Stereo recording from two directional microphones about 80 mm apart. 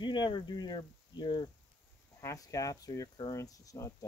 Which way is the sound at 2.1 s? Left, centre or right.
Left.